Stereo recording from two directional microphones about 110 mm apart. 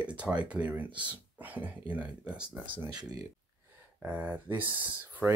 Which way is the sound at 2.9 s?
40° right (ahead or behind).